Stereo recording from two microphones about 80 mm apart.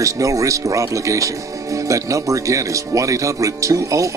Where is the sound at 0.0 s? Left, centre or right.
Right.